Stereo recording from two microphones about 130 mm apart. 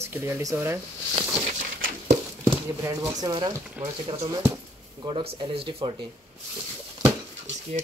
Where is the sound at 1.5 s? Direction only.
70° right (ahead or behind).